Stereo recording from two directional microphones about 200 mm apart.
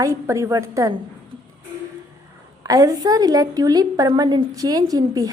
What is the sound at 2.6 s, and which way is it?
A woman's voice, 15° right (ahead or behind).